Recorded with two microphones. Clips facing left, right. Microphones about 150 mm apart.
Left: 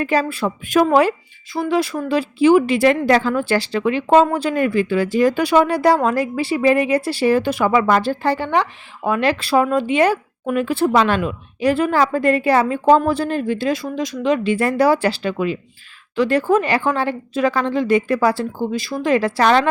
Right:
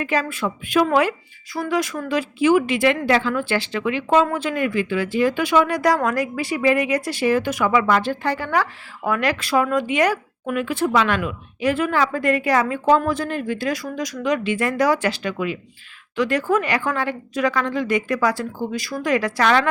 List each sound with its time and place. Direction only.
0.0 s speech: 35° left (ahead or behind)
1.5 s speech: 25° left (ahead or behind)